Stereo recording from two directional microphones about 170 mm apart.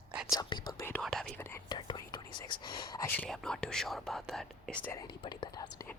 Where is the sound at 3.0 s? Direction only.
10° left (ahead or behind).